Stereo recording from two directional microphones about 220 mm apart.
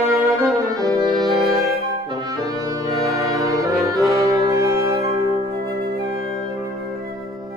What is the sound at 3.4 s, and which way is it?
Brass instrument, 15° right (ahead or behind).